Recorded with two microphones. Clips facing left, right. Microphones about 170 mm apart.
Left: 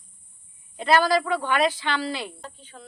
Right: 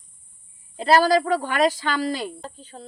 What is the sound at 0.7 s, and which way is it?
Speech, 35° right (ahead or behind).